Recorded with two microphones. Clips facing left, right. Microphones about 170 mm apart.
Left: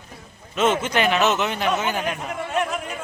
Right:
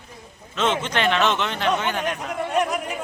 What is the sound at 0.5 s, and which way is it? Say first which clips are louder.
Speech: left 3 dB; 10° left (ahead or behind).